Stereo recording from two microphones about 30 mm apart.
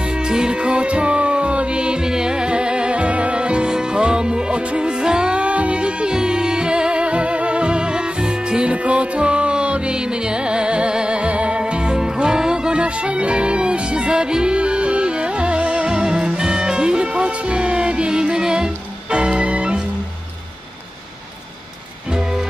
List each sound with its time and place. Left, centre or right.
0.3 s music: right
0.6 s music: right
2.0 s music: right
5.4 s music: right
6.1 s music: right
8.8 s music: right
11.1 s music: right
12.0 s music: right
12.8 s music: right
15.6 s music: right
15.9 s music: right